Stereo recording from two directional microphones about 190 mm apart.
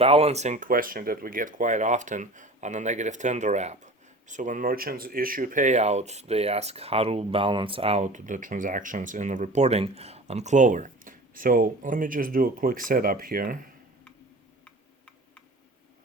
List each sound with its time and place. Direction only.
0.0 s speech: 30° right (ahead or behind); by 13.7 s 50° right (ahead or behind)